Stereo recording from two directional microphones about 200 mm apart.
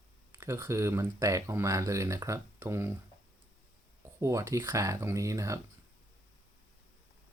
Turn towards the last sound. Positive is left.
turn(degrees=-15)  # may be behind; listen again after turning